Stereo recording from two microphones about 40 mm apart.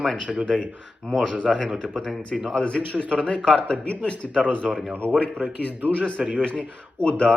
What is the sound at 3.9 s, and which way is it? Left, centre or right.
Speech, left.